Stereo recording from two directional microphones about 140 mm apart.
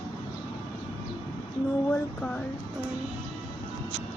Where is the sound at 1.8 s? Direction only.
10° left (ahead or behind).